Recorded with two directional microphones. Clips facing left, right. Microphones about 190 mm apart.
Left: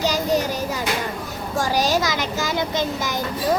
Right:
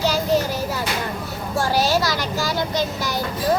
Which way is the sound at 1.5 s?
15° left (ahead or behind).